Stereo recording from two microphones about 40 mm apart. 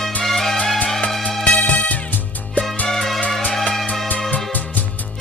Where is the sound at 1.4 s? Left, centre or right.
Left.